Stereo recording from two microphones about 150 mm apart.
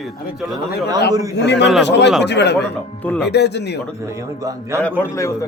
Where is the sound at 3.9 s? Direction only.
20° right (ahead or behind).